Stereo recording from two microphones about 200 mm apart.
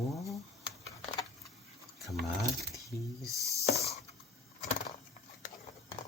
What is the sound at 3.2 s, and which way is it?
Speech, 15° right (ahead or behind).